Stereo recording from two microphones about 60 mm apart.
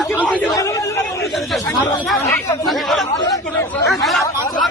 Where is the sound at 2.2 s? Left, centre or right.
Left.